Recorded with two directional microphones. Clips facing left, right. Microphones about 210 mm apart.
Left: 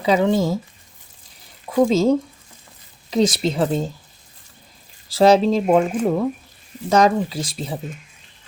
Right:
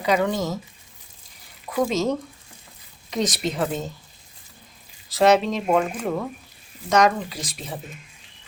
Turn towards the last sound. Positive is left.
turn(degrees=30)  # may be behind; listen again after turning